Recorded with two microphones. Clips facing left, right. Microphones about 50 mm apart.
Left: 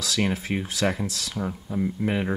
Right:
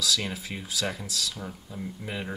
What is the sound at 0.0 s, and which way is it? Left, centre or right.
Speech, left.